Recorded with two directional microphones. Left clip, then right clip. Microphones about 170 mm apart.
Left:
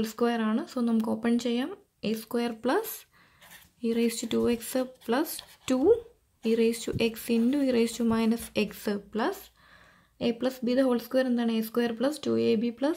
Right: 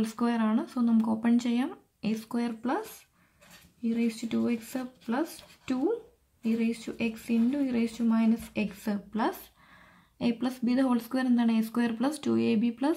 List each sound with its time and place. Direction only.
0.0 s speech: 20° left (ahead or behind)
2.6 s speech: 35° left (ahead or behind); by 12.9 s 15° left (ahead or behind)